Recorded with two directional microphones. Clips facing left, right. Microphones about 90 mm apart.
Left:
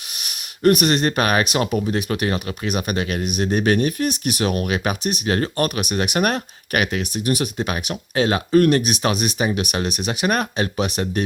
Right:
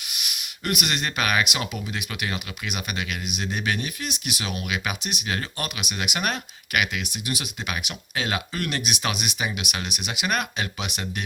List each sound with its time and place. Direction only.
0.1 s speech: 40° left (ahead or behind)